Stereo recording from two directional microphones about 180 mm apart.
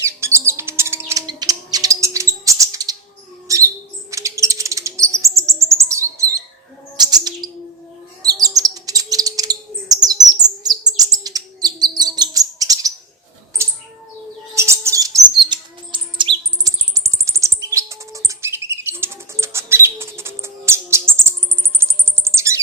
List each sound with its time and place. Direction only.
0.0 s bird: 15° right (ahead or behind)
3.5 s a sound: 20° right (ahead or behind)
4.1 s bird: 15° right (ahead or behind)
5.4 s chirp: 15° right (ahead or behind)
6.9 s bird: 20° right (ahead or behind)
14.5 s bird: 15° right (ahead or behind)
16.6 s chirp: 15° right (ahead or behind)
21.8 s music: 15° right (ahead or behind)